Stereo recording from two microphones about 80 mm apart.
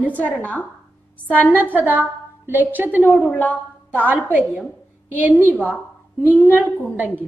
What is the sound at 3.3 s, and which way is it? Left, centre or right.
Speech, centre.